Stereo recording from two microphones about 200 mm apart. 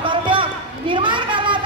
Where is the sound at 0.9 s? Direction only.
25° right (ahead or behind).